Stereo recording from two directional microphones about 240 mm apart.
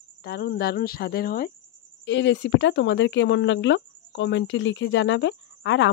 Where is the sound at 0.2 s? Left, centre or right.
Left.